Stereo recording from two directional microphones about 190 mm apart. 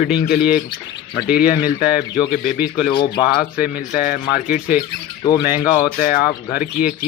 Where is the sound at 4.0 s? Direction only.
45° left (ahead or behind).